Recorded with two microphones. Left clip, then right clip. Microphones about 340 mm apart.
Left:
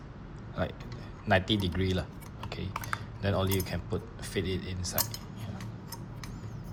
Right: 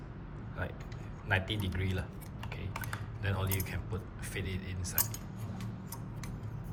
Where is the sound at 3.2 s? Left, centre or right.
Centre.